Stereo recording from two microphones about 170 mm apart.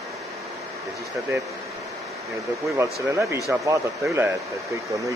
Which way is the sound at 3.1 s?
15° right (ahead or behind).